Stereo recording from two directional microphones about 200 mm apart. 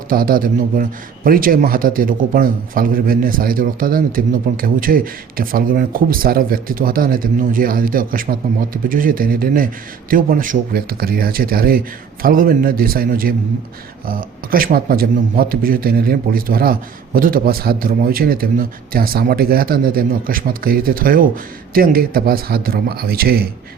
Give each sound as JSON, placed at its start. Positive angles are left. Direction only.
{"t": 0.1, "sound": "a man's voice", "side_deg": -45}